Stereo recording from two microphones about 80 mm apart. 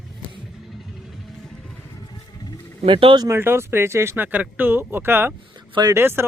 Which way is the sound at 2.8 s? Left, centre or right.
Right.